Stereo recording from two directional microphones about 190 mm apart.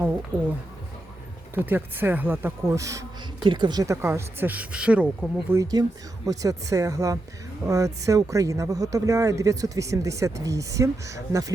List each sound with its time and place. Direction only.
1.5 s speech: 10° right (ahead or behind)
5.8 s speech: 25° right (ahead or behind)